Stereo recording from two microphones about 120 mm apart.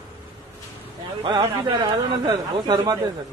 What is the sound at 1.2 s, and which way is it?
Speech, 35° right (ahead or behind).